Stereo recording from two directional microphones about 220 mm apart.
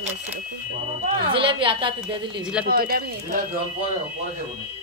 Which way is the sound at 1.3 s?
25° right (ahead or behind).